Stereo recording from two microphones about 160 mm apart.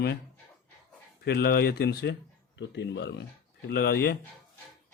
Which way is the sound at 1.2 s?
80° left.